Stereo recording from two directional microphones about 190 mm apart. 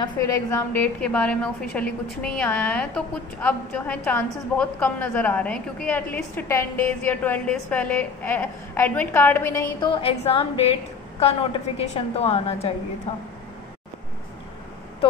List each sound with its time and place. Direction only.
0.0 s a woman's voice: 20° left (ahead or behind)
9.8 s a woman's voice: 30° left (ahead or behind)